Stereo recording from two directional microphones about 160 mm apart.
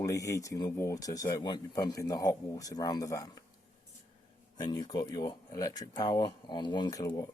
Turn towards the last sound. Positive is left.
turn(degrees=25)  # may be behind; listen again after turning